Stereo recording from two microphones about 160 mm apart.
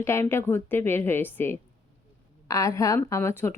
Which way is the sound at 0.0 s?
15° left (ahead or behind).